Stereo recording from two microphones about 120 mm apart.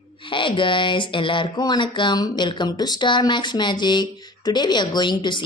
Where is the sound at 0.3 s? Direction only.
45° left (ahead or behind).